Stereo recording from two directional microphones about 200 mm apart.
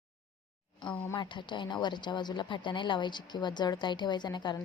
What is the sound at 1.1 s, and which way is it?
A woman's voice, 25° left (ahead or behind).